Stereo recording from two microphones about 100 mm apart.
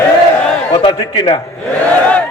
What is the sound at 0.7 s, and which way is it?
Speech, 70° left (ahead or behind).